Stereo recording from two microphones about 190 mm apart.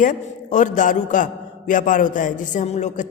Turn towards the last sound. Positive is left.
turn(degrees=35)  # may be behind; listen again after turning